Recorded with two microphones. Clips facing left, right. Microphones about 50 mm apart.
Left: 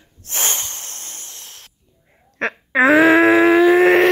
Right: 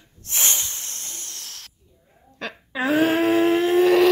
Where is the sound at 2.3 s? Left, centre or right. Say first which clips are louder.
Left 11 dB; left.